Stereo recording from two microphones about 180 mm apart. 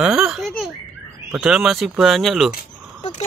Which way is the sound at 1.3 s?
5° right (ahead or behind).